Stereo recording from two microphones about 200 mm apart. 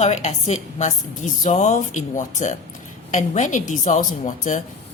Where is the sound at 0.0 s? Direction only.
35° left (ahead or behind).